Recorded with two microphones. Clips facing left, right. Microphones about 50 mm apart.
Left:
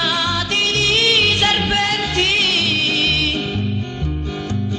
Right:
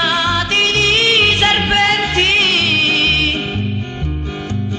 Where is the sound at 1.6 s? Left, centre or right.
Right.